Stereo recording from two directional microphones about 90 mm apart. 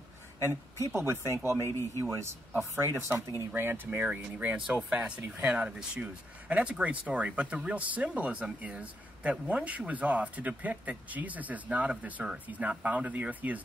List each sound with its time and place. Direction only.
0.5 s speech: 25° right (ahead or behind)